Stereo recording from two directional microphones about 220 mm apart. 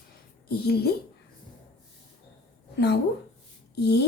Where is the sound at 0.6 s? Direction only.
45° left (ahead or behind).